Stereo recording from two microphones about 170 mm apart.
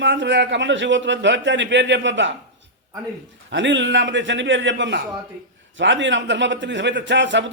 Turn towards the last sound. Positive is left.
turn(degrees=-90)